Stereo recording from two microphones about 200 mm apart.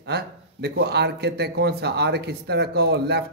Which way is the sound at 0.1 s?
55° right (ahead or behind).